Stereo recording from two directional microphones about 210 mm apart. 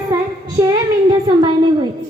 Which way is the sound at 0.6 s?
20° right (ahead or behind).